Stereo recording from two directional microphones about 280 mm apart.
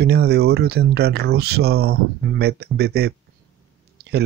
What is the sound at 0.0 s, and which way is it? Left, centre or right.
Speech, right.